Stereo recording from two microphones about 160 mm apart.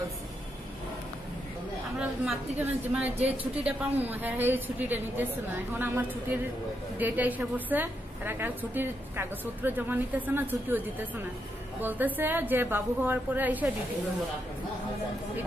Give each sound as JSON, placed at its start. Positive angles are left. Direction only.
{"t": 2.0, "sound": "a woman's voice", "side_deg": -10}
{"t": 11.8, "sound": "a woman's voice", "side_deg": -10}